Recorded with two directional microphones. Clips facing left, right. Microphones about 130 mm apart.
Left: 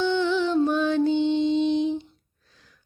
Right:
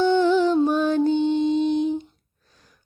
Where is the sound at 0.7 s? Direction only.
40° right (ahead or behind).